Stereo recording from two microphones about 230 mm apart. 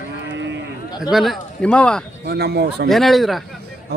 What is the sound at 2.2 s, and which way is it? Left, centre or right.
Speech, right.